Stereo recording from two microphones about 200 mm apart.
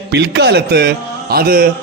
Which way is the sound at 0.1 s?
60° right (ahead or behind).